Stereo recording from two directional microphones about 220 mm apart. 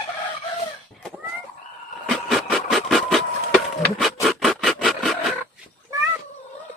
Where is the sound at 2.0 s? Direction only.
Centre (ahead or behind).